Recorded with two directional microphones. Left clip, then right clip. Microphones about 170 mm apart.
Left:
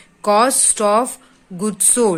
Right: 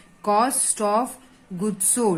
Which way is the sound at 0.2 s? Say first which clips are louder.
Left 6 dB; 25° left (ahead or behind).